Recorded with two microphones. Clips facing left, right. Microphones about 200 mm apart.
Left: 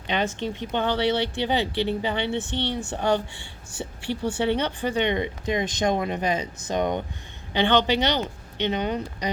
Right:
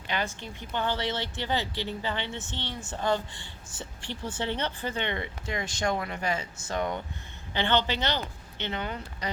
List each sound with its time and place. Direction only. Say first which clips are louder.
0.1 s speech: left 7 dB; 20° left (ahead or behind)
0.9 s speech: left 8 dB; 65° left (ahead or behind)
1.5 s speech: left 5 dB; 15° left (ahead or behind)
2.5 s speech: left 9 dB; 65° left (ahead or behind)
3.8 s speech: left 9 dB; 10° left (ahead or behind)